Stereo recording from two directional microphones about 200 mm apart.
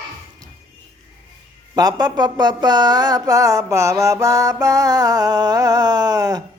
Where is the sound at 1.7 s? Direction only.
20° right (ahead or behind).